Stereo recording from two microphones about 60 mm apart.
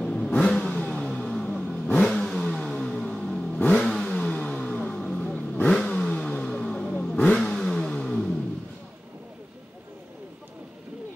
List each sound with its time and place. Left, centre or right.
0.0 s vehicle: centre